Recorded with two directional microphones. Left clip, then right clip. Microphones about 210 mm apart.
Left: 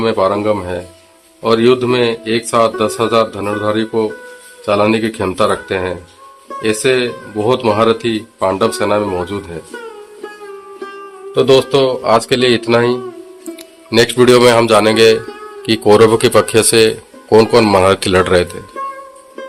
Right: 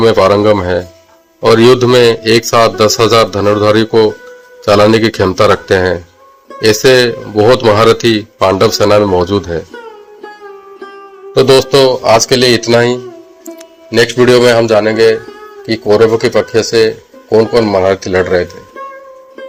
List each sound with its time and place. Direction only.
0.0 s a man's voice: 25° right (ahead or behind)
10.8 s music: centre (ahead or behind)
11.3 s speech: 15° right (ahead or behind)
13.9 s a man's voice: 5° left (ahead or behind)
15.2 s a sound: centre (ahead or behind)
15.6 s speech: 15° left (ahead or behind)
18.7 s music: centre (ahead or behind)